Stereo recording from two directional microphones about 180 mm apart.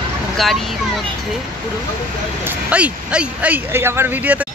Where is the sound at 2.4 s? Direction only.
5° right (ahead or behind).